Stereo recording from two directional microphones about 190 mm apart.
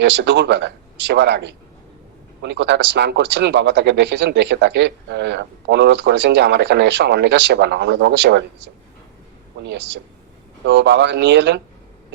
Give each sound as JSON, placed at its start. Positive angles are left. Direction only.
{"t": 0.0, "sound": "speech", "side_deg": -70}
{"t": 10.7, "sound": "speech", "side_deg": -65}